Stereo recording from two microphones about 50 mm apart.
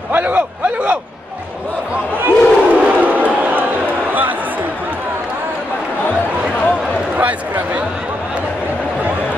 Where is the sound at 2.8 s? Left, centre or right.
Right.